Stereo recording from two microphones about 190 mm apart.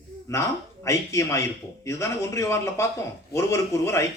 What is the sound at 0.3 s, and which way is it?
A man's voice, 15° left (ahead or behind).